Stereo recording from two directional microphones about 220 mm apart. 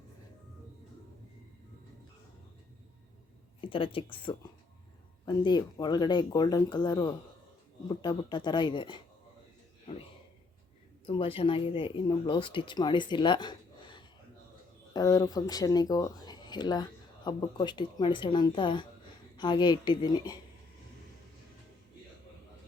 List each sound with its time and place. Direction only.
3.6 s speech: 25° left (ahead or behind)
11.0 s speech: 25° left (ahead or behind)